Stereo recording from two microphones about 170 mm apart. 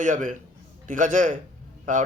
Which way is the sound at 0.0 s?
50° right (ahead or behind).